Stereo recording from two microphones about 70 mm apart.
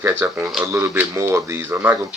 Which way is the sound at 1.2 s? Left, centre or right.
Right.